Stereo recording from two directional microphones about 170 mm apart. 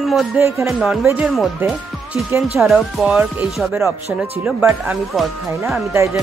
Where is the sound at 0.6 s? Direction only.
Centre (ahead or behind).